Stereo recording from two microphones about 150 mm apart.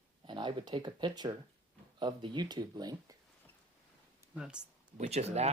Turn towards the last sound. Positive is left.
turn(degrees=-45)  # may be behind; listen again after turning